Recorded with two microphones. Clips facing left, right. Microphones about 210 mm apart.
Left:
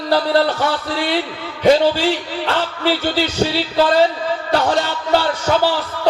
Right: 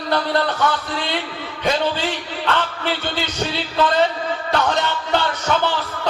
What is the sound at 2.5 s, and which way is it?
Music, 30° left (ahead or behind).